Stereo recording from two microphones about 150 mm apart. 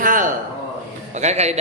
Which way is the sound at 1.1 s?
50° right (ahead or behind).